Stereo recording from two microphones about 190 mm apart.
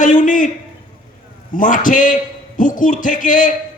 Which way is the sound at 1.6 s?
45° left (ahead or behind).